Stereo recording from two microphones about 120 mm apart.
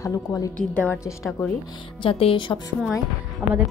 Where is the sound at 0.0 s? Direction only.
30° left (ahead or behind).